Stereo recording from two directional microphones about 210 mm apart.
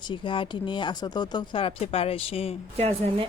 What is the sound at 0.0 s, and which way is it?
Speech, 25° left (ahead or behind).